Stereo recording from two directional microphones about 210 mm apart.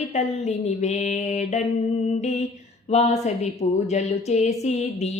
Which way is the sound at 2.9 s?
30° left (ahead or behind).